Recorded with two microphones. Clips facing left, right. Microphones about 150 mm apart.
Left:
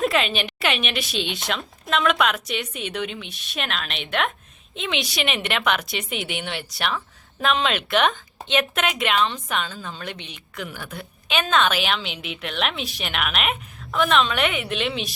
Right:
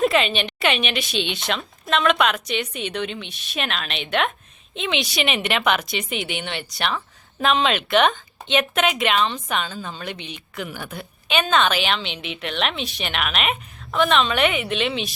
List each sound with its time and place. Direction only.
0.0 s speech: centre (ahead or behind)